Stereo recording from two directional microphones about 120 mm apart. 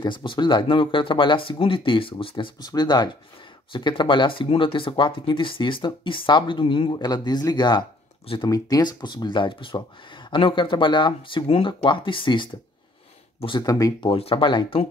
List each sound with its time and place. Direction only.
0.0 s speech: 45° left (ahead or behind)
14.0 s speech: 50° left (ahead or behind)